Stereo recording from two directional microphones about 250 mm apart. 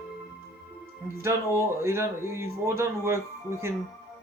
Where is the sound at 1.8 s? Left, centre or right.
Centre.